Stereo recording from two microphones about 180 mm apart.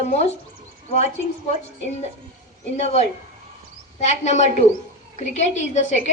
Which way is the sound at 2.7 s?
40° left (ahead or behind).